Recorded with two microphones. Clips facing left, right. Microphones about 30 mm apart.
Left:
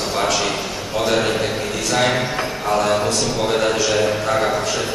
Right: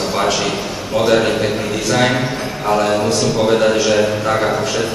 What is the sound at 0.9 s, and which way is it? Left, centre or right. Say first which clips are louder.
A man's voice: right 5 dB; centre.